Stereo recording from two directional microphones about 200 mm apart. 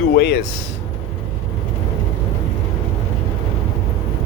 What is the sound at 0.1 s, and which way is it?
Speech, 55° left (ahead or behind).